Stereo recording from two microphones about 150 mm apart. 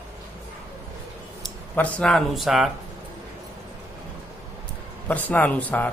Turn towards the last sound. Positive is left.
turn(degrees=10)  # may be behind; listen again after turning